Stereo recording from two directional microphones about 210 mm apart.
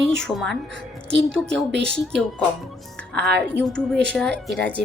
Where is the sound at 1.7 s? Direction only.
55° right (ahead or behind).